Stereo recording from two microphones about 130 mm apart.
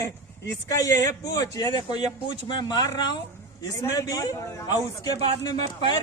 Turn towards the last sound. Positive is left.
turn(degrees=30)  # may be behind; listen again after turning